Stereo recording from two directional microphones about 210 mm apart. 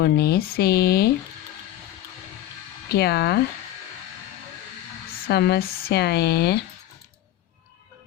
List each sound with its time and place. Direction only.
0.0 s speech: 50° left (ahead or behind)
2.9 s speech: 50° left (ahead or behind)
5.3 s speech: 50° left (ahead or behind)